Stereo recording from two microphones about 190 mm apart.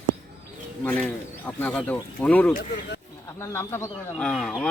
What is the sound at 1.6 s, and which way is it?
Speech, 5° left (ahead or behind).